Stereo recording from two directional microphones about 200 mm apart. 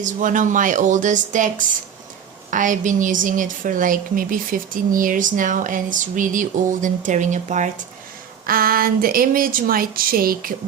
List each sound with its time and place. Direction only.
0.0 s a woman's voice: 40° right (ahead or behind)